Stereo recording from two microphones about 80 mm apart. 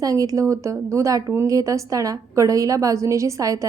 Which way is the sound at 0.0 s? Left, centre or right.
Right.